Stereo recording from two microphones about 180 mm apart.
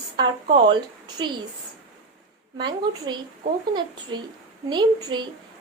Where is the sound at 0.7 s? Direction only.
25° right (ahead or behind).